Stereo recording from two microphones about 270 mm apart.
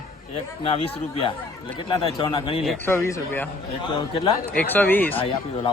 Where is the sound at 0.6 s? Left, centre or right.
Left.